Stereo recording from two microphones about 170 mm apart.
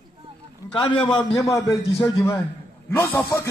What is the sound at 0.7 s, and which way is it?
A man's voice, 30° left (ahead or behind).